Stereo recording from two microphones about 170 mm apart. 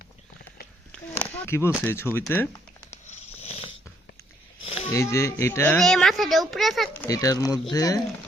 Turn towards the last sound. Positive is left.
turn(degrees=20)  # may be behind; listen again after turning